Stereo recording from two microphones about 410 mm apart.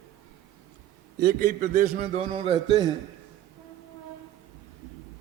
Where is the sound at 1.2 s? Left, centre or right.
Right.